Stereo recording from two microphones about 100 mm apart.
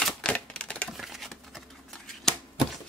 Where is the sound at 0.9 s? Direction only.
Centre (ahead or behind).